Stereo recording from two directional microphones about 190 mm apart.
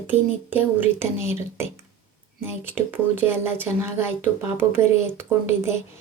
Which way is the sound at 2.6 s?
10° right (ahead or behind).